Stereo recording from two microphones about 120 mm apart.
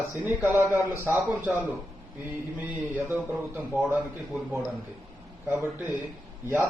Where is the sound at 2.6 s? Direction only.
20° right (ahead or behind).